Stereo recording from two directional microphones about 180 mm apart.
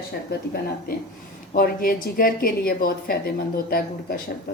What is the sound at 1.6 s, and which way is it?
A woman's voice, 55° left (ahead or behind).